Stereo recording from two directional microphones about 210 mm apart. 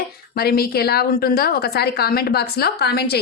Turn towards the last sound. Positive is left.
turn(degrees=50)  # may be behind; listen again after turning